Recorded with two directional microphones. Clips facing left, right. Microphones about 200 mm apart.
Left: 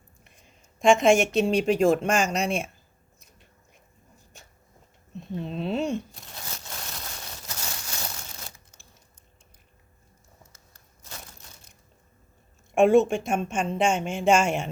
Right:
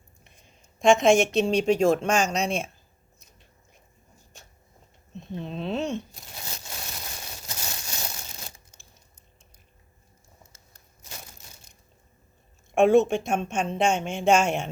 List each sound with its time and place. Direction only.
0.8 s speech: centre (ahead or behind)
5.1 s speech: 5° left (ahead or behind)
6.3 s a sound: 20° right (ahead or behind)
12.7 s speech: centre (ahead or behind)